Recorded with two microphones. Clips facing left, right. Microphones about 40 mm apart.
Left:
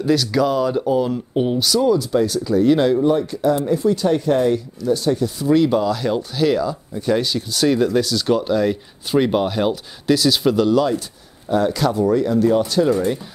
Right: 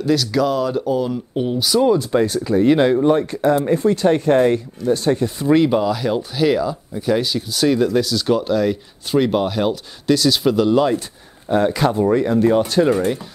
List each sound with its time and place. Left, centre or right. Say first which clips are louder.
0.0 s speech: even; centre
1.8 s speech: right 2 dB; right; by 10.7 s centre
10.7 s speech: right 1 dB; right